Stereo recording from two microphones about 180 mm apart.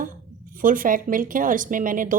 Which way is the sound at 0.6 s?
50° right (ahead or behind).